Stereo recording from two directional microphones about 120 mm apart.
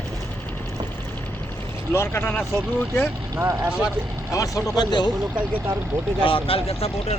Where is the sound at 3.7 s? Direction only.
5° right (ahead or behind).